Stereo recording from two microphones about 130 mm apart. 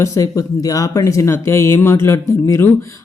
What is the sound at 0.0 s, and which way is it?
Speech, 25° left (ahead or behind).